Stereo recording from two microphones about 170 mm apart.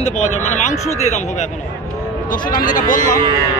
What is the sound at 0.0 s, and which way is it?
Speech, 45° left (ahead or behind).